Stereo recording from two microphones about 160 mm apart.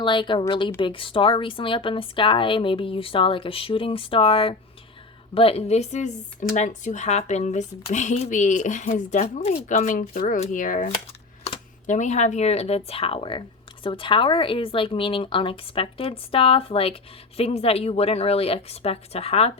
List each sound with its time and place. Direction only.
0.0 s speech: 30° left (ahead or behind); by 10.8 s 55° left (ahead or behind)
11.9 s speech: 50° left (ahead or behind)